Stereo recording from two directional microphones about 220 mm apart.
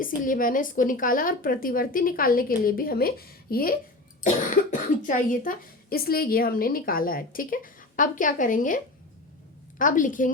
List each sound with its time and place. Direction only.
0.0 s speech: 40° left (ahead or behind)